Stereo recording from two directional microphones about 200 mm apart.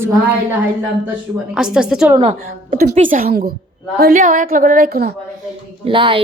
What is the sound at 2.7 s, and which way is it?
A woman's voice, 45° right (ahead or behind).